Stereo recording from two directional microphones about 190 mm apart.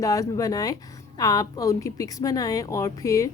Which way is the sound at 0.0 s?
20° left (ahead or behind).